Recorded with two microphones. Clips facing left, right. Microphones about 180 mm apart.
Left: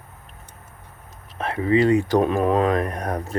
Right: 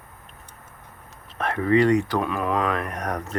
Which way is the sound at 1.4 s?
30° left (ahead or behind).